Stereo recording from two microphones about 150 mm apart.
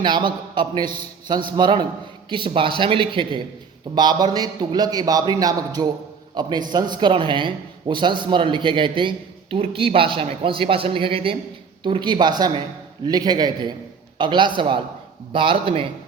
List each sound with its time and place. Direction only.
0.0 s a man's voice: 30° right (ahead or behind)